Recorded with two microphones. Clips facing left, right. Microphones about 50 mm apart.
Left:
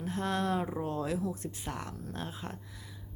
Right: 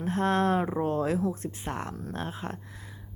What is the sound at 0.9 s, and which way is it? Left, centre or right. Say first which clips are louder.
A woman's voice: right 6 dB; right.